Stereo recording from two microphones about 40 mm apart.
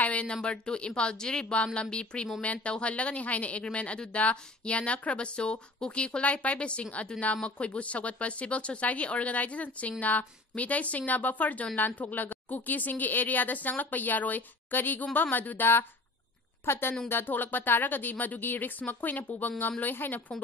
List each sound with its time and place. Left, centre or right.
0.0 s a sound: left
0.3 s speech: left
2.4 s speech: left
16.6 s a woman's voice: left
17.1 s speech: left